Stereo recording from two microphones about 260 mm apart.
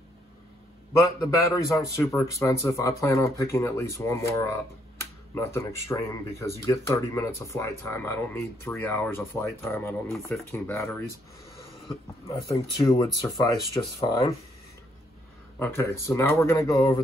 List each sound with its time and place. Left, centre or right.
0.9 s speech: centre
15.6 s speech: centre